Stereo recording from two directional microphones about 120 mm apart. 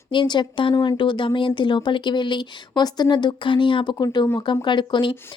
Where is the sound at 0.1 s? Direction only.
40° left (ahead or behind).